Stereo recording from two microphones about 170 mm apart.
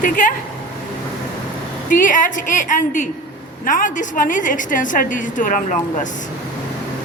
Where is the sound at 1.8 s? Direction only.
50° left (ahead or behind).